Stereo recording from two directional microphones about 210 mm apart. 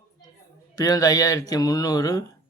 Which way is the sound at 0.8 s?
15° left (ahead or behind).